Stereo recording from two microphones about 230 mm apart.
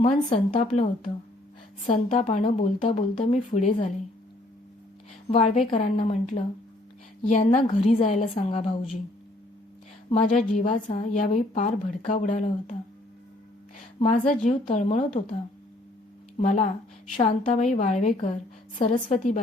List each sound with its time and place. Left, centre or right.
0.0 s speech: left
5.3 s speech: left
10.5 s a woman's voice: left
14.0 s speech: left
16.4 s a woman's voice: left